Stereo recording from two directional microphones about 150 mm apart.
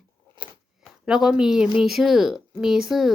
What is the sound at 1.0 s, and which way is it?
A woman's voice, 5° right (ahead or behind).